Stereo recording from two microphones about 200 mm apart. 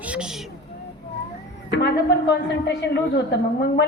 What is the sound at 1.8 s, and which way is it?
Speech, 60° left (ahead or behind).